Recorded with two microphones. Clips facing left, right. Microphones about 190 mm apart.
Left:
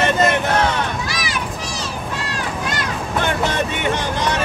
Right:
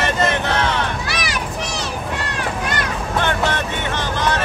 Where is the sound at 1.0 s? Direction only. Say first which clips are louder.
Right 1 dB; 65° right (ahead or behind).